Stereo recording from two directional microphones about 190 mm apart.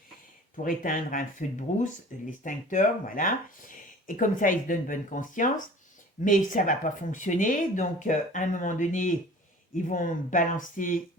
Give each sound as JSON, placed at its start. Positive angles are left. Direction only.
{"t": 0.5, "sound": "speech", "side_deg": 45}